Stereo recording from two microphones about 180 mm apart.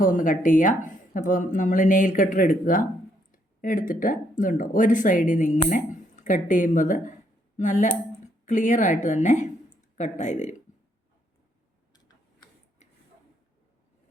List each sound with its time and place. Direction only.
0.0 s speech: 50° left (ahead or behind)